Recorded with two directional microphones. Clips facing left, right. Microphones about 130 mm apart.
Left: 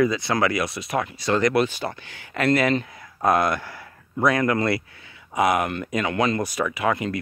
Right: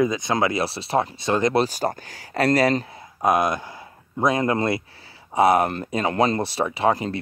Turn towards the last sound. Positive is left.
turn(degrees=-30)  # may be behind; listen again after turning